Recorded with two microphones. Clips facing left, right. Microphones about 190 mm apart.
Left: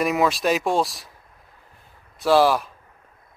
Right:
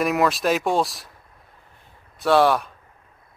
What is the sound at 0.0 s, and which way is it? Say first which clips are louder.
Speech: even; centre (ahead or behind).